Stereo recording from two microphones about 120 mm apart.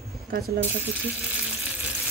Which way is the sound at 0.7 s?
10° right (ahead or behind).